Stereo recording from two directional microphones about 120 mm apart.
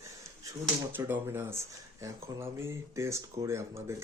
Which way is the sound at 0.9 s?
15° right (ahead or behind).